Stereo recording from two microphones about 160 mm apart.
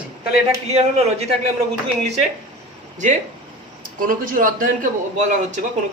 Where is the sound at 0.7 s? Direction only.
40° right (ahead or behind).